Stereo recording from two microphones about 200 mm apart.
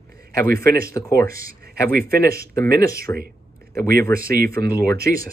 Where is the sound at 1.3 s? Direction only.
45° right (ahead or behind).